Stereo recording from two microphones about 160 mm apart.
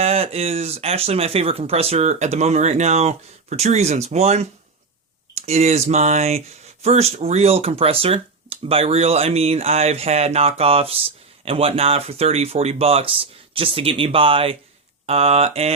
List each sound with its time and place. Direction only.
0.0 s speech: 40° right (ahead or behind)